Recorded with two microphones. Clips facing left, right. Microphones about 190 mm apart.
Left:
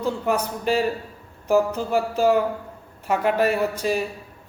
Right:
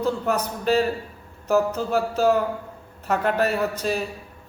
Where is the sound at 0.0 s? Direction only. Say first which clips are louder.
Even; 10° left (ahead or behind).